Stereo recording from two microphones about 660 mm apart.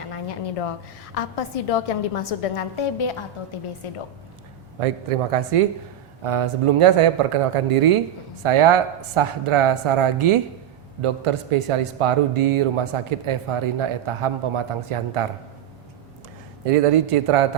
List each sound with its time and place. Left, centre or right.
0.1 s a sound: left
1.1 s a woman's voice: left
4.8 s speech: right
16.6 s speech: right